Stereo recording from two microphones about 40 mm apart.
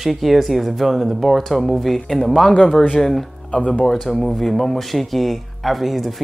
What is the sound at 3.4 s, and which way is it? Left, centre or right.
Speech, left.